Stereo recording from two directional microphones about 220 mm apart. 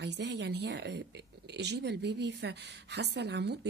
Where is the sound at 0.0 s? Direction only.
50° right (ahead or behind).